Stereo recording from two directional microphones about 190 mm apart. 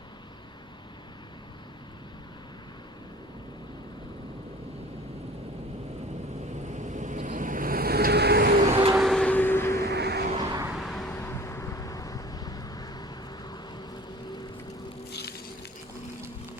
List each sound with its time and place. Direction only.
6.7 s vehicle: 40° right (ahead or behind); by 8.6 s 55° right (ahead or behind)
8.6 s vehicle: 35° right (ahead or behind)
9.0 s vehicle: centre (ahead or behind)
9.8 s vehicle: 60° right (ahead or behind)
10.8 s vehicle: centre (ahead or behind)
11.1 s vehicle: 10° left (ahead or behind)
15.1 s a sound: 60° left (ahead or behind)